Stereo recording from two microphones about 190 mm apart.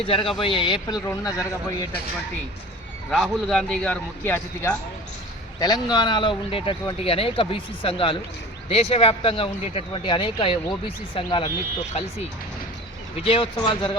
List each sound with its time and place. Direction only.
0.0 s speech: 30° left (ahead or behind)
3.1 s a man's voice: centre (ahead or behind)
5.5 s speech: 20° left (ahead or behind)
13.2 s speech: 30° left (ahead or behind)